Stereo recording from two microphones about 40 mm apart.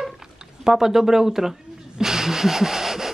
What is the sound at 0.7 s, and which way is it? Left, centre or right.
Speech, centre.